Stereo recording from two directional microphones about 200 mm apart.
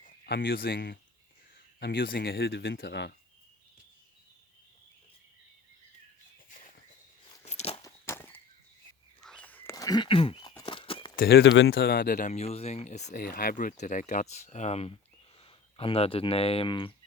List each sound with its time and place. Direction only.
0.0 s speech: 50° left (ahead or behind)
7.4 s a sound: 30° left (ahead or behind)
7.8 s walk: 15° left (ahead or behind)
9.2 s a sound: 5° left (ahead or behind); by 10.5 s 25° left (ahead or behind)
10.6 s horse: 25° left (ahead or behind)
11.2 s speech: 50° left (ahead or behind); by 16.9 s 25° left (ahead or behind)